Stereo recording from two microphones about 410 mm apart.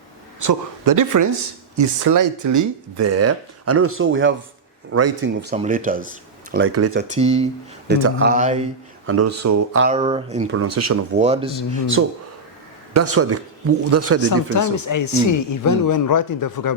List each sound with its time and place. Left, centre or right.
0.3 s a man's voice: right; by 7.4 s centre
7.9 s speech: right
9.0 s a man's voice: right
9.8 s speech: centre
10.5 s a man's voice: right
11.2 s speech: centre
12.0 s a man's voice: right
14.3 s speech: left